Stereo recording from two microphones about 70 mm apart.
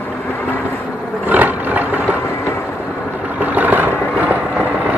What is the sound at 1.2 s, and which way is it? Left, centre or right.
Roar, right.